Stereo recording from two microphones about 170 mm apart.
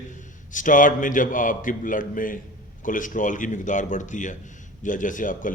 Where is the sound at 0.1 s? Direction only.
50° left (ahead or behind).